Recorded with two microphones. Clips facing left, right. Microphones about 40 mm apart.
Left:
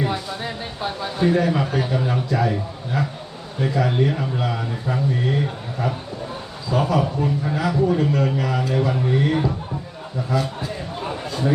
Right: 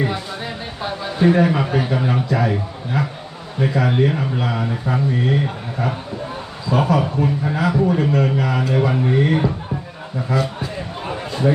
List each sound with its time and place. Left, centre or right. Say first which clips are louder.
0.0 s a sound: right 1 dB; centre
1.2 s speech: right 4 dB; right
2.4 s a man's voice: right 2 dB; centre
6.7 s a man's voice: right 3 dB; centre
7.0 s a man's voice: right 2 dB; centre
11.1 s a sound: right 5 dB; right